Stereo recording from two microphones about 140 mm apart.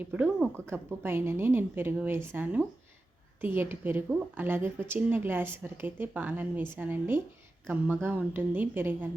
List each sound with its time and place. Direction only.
0.0 s a woman's voice: 10° right (ahead or behind)